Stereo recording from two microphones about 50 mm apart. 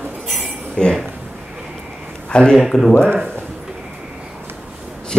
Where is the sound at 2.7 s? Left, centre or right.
Centre.